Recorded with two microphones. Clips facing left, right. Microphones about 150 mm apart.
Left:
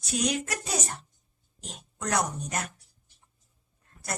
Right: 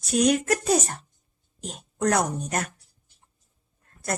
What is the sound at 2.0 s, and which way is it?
Speech, 50° right (ahead or behind).